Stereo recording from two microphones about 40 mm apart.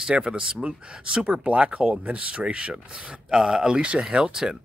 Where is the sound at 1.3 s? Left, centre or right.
Right.